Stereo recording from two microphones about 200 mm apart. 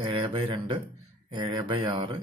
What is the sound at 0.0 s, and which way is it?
Speech, 25° right (ahead or behind).